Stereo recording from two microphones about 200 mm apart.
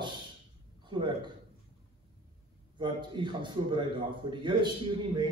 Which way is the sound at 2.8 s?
25° right (ahead or behind).